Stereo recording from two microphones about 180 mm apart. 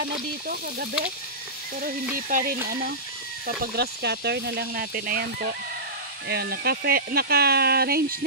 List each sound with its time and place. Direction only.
2.1 s stir: 50° right (ahead or behind)
3.4 s speech: 65° right (ahead or behind)